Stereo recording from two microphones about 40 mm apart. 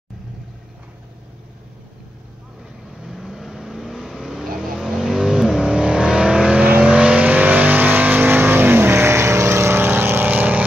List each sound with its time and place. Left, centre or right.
3.0 s vehicle: centre
5.6 s vehicle: right
10.3 s vehicle: right